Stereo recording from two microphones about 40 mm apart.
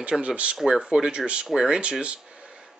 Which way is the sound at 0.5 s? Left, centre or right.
Centre.